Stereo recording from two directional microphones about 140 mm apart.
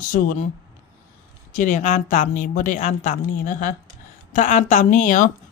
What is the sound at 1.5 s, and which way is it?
Speech, 65° left (ahead or behind).